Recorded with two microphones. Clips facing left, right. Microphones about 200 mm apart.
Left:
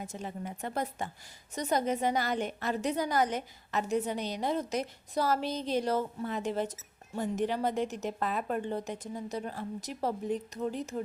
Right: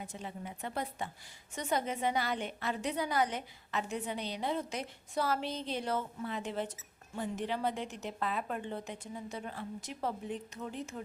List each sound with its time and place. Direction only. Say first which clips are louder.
0.1 s a woman's voice: left 4 dB; 45° left (ahead or behind)